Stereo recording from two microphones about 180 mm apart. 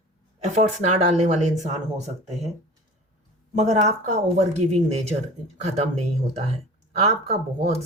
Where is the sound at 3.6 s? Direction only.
40° right (ahead or behind).